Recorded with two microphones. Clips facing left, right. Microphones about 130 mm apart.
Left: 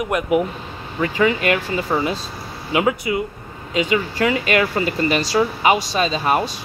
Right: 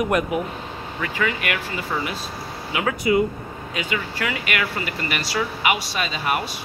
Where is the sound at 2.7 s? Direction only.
15° left (ahead or behind).